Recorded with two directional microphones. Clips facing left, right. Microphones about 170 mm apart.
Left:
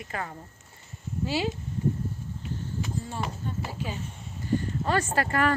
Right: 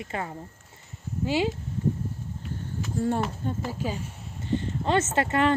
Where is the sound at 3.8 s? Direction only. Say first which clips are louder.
Right 4 dB; 45° right (ahead or behind).